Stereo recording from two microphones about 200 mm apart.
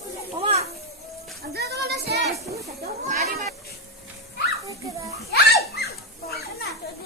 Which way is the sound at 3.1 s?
45° right (ahead or behind).